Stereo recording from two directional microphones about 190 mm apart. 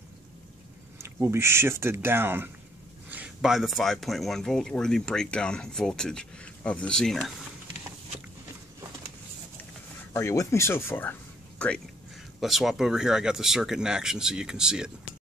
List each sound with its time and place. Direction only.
0.9 s speech: 15° right (ahead or behind)
10.1 s speech: 15° left (ahead or behind); by 14.9 s 5° right (ahead or behind)